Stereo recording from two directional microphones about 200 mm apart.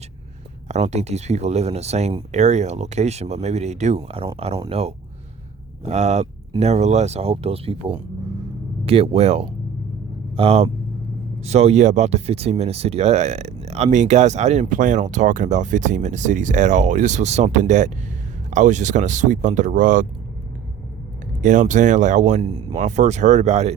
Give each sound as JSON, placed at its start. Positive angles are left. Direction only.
{"t": 0.7, "sound": "speech", "side_deg": -35}
{"t": 21.4, "sound": "speech", "side_deg": -40}